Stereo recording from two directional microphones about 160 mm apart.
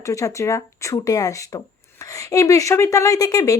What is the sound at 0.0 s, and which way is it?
A woman's voice, 20° left (ahead or behind).